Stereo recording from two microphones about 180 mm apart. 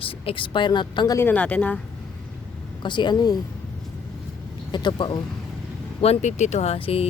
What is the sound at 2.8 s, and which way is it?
Speech, 25° left (ahead or behind).